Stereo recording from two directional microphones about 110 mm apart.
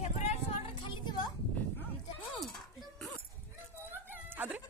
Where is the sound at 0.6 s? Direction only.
50° left (ahead or behind).